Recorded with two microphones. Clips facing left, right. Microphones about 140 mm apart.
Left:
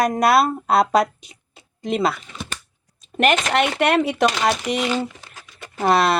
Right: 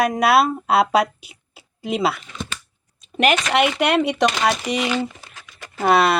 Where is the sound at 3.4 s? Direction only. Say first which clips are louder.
Even; centre (ahead or behind).